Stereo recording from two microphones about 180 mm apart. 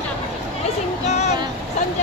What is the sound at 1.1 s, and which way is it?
Speech, 40° left (ahead or behind).